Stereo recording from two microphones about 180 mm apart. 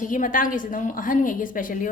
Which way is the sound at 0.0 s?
50° left (ahead or behind).